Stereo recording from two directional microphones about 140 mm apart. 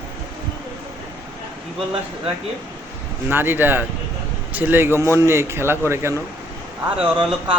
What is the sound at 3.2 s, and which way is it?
Speech, 15° right (ahead or behind).